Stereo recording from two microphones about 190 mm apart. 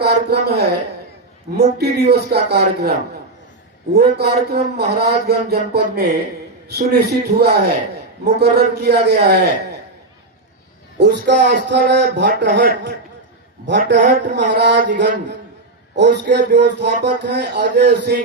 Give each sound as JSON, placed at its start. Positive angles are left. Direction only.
{"t": 0.0, "sound": "speech", "side_deg": -60}
{"t": 1.8, "sound": "a man's voice", "side_deg": -60}
{"t": 3.9, "sound": "a man's voice", "side_deg": -60}
{"t": 10.9, "sound": "a man's voice", "side_deg": -60}